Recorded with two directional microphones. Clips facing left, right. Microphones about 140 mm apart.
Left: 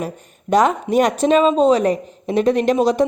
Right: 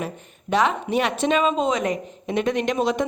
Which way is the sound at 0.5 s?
40° left (ahead or behind).